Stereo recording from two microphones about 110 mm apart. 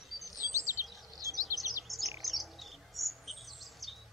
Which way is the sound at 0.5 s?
25° right (ahead or behind).